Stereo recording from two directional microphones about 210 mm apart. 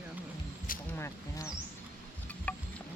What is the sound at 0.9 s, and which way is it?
Speech, 15° left (ahead or behind).